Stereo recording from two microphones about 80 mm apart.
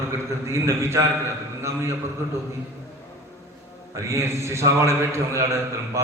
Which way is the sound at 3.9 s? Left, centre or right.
Right.